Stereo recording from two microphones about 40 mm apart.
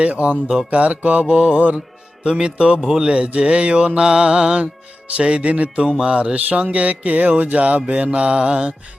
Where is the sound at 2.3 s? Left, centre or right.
Centre.